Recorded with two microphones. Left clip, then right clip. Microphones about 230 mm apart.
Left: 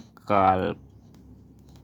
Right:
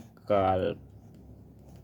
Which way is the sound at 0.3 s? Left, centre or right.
Left.